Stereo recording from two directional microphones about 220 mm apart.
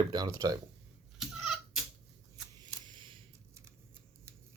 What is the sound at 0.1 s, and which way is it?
Speech, 15° right (ahead or behind).